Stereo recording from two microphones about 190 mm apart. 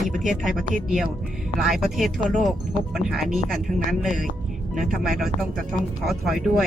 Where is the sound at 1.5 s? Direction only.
Centre (ahead or behind).